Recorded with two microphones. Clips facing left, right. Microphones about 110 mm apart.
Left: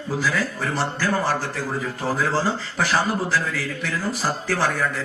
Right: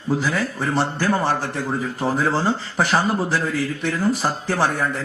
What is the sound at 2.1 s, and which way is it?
Speech, 25° right (ahead or behind).